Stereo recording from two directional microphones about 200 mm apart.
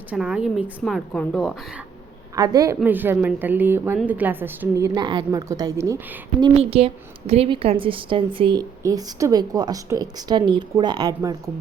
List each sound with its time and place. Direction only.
0.1 s a woman's voice: 5° right (ahead or behind)
2.3 s a woman's voice: 20° right (ahead or behind)
6.5 s a woman's voice: 30° right (ahead or behind)